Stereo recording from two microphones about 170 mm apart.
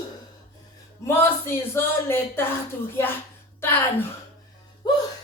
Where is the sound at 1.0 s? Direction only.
15° left (ahead or behind).